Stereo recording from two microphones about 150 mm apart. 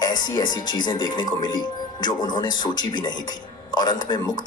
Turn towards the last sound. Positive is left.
turn(degrees=30)  # may be behind; listen again after turning